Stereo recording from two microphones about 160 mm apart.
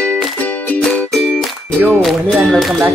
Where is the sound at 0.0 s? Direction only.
5° left (ahead or behind).